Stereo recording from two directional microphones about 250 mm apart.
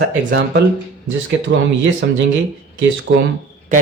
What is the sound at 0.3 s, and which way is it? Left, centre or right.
Speech, right.